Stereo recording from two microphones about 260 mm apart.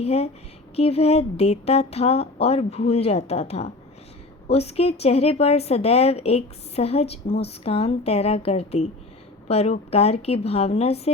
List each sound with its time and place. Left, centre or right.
0.0 s speech: left